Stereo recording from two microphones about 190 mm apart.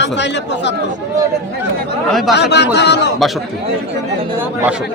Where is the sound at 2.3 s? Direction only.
60° left (ahead or behind).